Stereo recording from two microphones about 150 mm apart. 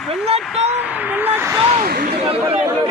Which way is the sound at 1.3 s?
15° right (ahead or behind).